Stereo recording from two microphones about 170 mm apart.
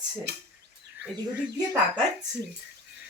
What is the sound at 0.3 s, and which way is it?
Speech, 75° right (ahead or behind).